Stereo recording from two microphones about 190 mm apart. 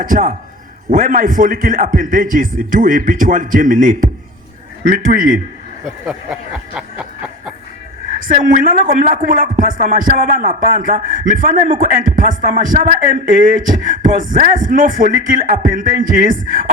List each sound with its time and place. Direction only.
0.0 s speech: 45° right (ahead or behind)
5.8 s a sound: 5° right (ahead or behind)
8.2 s speech: 45° right (ahead or behind)